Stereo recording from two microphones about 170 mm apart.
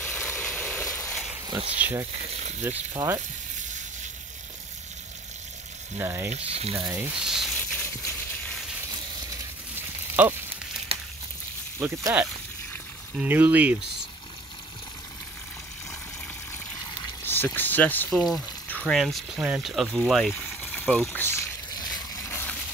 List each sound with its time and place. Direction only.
0.0 s a sound: 5° left (ahead or behind)
1.5 s frying: 35° right (ahead or behind)
1.8 s speech: 10° right (ahead or behind)
2.9 s speech: 20° right (ahead or behind)
5.9 s speech: 15° right (ahead or behind)
6.3 s frying: 35° right (ahead or behind)
6.9 s speech: 10° right (ahead or behind)
9.8 s a sound: 10° right (ahead or behind)
11.8 s speech: 15° right (ahead or behind)
17.2 s speech: 10° left (ahead or behind)
21.7 s a sound: 25° left (ahead or behind)